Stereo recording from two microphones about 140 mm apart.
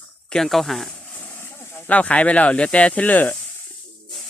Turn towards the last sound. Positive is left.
turn(degrees=10)  # may be behind; listen again after turning